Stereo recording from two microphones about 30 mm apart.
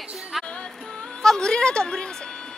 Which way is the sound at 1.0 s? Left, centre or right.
Centre.